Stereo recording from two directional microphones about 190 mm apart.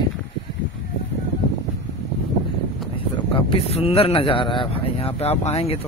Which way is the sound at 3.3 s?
30° left (ahead or behind).